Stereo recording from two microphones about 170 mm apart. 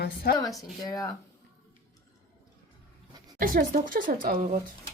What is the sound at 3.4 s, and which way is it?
Speech, 55° right (ahead or behind).